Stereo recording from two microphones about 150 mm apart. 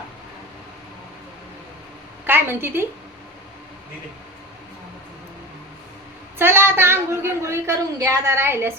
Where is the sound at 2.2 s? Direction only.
15° right (ahead or behind).